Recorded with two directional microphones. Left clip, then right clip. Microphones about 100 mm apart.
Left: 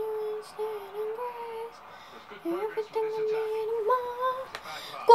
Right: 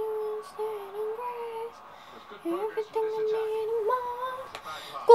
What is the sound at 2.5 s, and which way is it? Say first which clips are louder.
Speech: right 1 dB; 35° left (ahead or behind).